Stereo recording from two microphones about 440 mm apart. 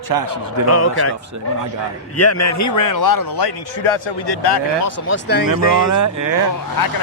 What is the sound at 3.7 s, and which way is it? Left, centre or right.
Speech, left.